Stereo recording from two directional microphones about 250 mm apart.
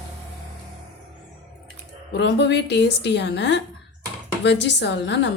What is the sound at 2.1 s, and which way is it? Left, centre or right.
A woman's voice, left.